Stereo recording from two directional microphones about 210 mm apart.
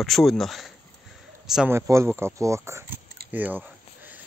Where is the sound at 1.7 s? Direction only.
10° right (ahead or behind).